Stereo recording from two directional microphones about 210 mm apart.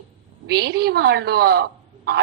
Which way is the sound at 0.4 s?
50° right (ahead or behind).